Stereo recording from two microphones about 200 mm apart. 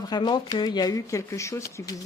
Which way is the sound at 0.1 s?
20° left (ahead or behind).